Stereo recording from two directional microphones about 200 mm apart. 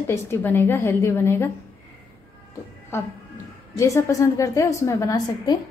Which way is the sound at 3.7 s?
15° left (ahead or behind).